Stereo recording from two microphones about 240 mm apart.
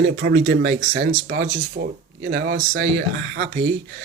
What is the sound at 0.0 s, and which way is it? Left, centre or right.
Speech, right.